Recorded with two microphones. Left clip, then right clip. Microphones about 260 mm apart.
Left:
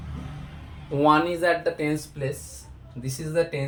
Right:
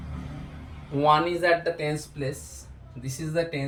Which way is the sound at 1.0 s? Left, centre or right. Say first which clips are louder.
Even; left.